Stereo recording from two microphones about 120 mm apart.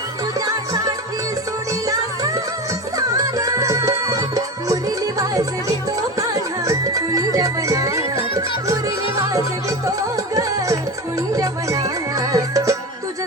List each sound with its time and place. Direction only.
0.3 s music: 30° right (ahead or behind)
11.3 s music: 30° right (ahead or behind)